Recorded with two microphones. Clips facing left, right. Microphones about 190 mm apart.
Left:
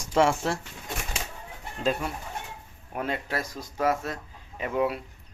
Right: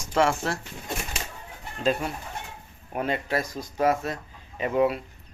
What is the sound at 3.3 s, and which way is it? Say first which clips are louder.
Speech: right 4 dB; 15° right (ahead or behind).